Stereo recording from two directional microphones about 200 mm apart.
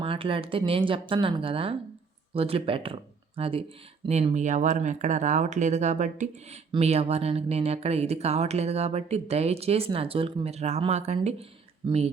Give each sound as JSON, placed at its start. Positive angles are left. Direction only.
{"t": 0.0, "sound": "speech", "side_deg": -25}